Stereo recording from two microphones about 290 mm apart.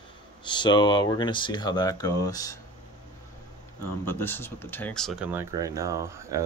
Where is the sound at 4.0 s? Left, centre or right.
Centre.